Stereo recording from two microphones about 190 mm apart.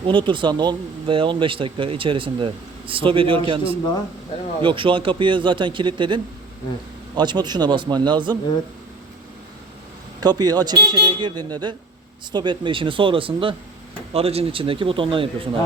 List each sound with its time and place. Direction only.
0.0 s speech: 25° right (ahead or behind)
10.2 s speech: 20° right (ahead or behind)